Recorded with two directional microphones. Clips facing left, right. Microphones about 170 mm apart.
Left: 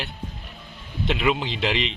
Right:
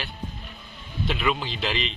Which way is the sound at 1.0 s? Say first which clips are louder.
Left 3 dB; 20° left (ahead or behind).